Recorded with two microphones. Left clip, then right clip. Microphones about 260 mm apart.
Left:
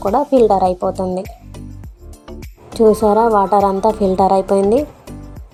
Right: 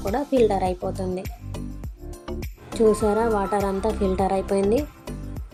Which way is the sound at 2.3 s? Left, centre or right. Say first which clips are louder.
Left 1 dB; centre.